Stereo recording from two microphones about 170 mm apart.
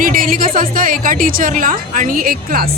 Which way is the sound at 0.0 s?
55° right (ahead or behind).